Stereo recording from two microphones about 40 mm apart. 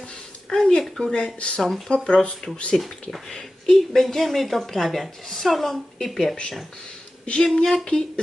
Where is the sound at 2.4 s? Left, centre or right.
Centre.